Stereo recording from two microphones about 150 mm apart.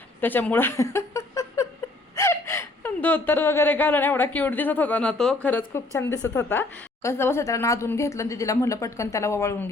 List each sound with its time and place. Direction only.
0.2 s speech: 10° left (ahead or behind)